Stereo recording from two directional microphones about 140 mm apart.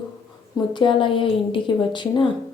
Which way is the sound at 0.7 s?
35° left (ahead or behind).